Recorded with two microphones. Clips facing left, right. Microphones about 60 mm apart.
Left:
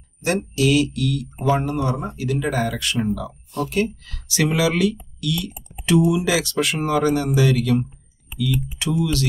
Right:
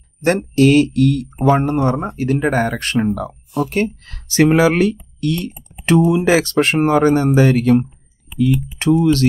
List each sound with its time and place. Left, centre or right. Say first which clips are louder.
0.6 s speech: right 8 dB; right